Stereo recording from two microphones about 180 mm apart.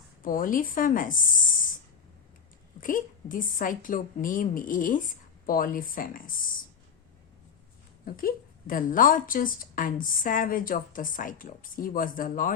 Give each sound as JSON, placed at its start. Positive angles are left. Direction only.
{"t": 0.3, "sound": "a woman's voice", "side_deg": 50}
{"t": 2.8, "sound": "a woman's voice", "side_deg": 50}
{"t": 8.0, "sound": "a woman's voice", "side_deg": 55}